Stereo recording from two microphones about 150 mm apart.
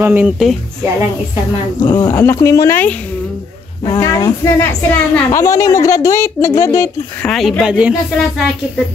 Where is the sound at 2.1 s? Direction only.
15° left (ahead or behind).